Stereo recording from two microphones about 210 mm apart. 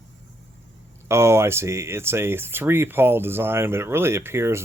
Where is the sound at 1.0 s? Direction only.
15° right (ahead or behind).